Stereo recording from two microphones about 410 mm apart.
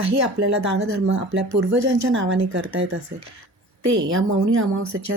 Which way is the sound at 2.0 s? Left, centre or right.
Right.